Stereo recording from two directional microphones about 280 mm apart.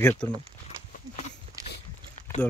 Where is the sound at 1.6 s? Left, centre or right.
Centre.